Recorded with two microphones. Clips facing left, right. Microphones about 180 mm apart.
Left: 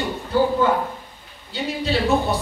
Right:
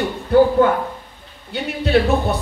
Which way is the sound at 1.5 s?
60° right (ahead or behind).